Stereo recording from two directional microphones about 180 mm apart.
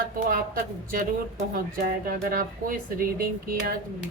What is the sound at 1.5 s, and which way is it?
A woman's voice, 50° right (ahead or behind).